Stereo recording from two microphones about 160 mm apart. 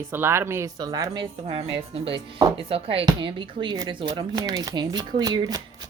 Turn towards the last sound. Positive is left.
turn(degrees=-20)  # may be behind; listen again after turning